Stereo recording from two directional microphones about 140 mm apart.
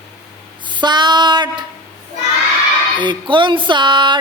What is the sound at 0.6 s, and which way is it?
Female singing, 35° right (ahead or behind).